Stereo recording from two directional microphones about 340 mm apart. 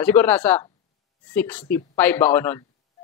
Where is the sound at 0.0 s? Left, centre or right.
Centre.